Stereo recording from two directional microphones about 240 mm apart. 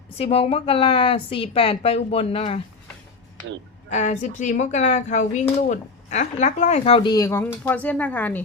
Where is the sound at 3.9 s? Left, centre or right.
Left; by 8.4 s centre.